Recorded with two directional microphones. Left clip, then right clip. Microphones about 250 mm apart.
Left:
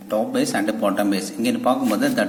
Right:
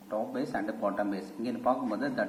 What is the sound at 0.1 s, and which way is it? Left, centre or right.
Speech, left.